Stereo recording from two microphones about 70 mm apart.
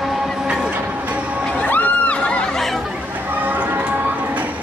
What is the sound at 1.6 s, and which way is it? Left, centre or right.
Music, centre.